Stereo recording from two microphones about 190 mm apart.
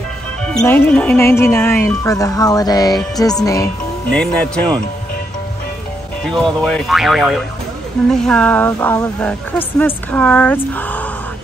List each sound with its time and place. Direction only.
0.6 s speech: 10° left (ahead or behind)
4.1 s speech: 5° left (ahead or behind)
6.3 s speech: centre (ahead or behind)